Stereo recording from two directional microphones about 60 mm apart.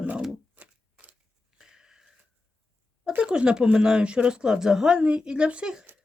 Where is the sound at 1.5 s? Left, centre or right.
Centre.